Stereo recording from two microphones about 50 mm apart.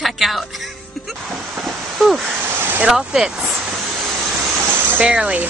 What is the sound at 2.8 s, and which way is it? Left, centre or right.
Speech, centre.